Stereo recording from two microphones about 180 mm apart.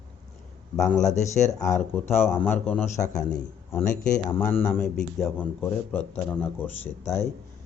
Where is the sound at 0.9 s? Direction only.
40° left (ahead or behind).